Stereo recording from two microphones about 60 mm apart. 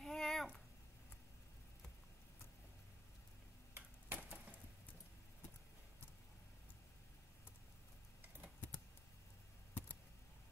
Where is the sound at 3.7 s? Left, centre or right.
Right.